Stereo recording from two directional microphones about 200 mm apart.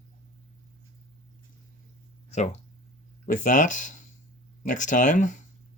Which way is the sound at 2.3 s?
35° left (ahead or behind).